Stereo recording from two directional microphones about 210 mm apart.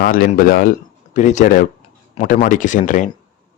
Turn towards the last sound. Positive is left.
turn(degrees=35)  # may be behind; listen again after turning